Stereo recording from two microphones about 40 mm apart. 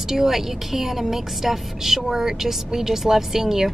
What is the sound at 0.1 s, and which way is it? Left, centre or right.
A woman's voice, centre.